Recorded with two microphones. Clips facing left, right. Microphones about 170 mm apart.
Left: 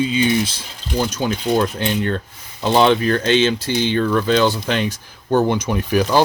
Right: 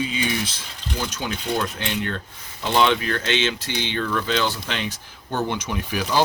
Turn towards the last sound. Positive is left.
turn(degrees=45)  # may be behind; listen again after turning